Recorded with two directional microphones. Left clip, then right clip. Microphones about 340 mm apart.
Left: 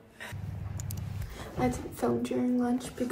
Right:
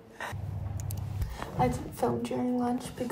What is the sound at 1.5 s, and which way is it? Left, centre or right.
Speech, centre.